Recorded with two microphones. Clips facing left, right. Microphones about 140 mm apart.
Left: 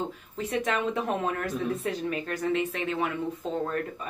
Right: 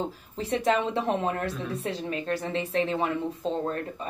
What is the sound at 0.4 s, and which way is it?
A woman's voice, 30° right (ahead or behind).